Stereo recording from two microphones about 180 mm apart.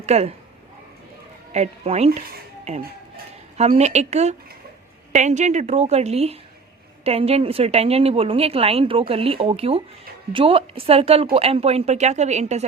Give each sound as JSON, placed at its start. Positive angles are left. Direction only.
{"t": 0.0, "sound": "a woman's voice", "side_deg": -35}
{"t": 1.5, "sound": "a woman's voice", "side_deg": -35}
{"t": 3.6, "sound": "a woman's voice", "side_deg": -35}